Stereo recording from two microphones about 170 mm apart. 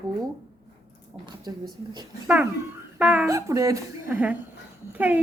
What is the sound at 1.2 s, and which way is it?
Speech, 25° right (ahead or behind).